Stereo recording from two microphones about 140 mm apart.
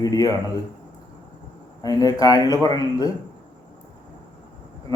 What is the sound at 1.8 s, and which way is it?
Speech, 25° left (ahead or behind).